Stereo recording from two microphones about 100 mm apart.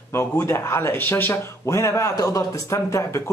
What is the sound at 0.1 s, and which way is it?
Speech, 30° left (ahead or behind).